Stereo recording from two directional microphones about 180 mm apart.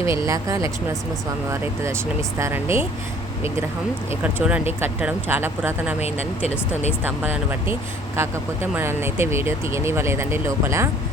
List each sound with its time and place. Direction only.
0.0 s speech: 15° right (ahead or behind)
4.2 s speech: 5° right (ahead or behind)
6.0 s speech: 35° left (ahead or behind)
7.0 s speech: 10° right (ahead or behind)